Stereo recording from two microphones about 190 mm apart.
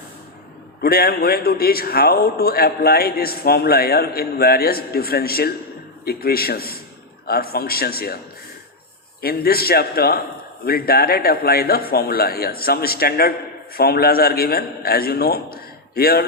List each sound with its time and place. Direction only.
0.8 s speech: 50° left (ahead or behind)
9.2 s a man's voice: 55° left (ahead or behind)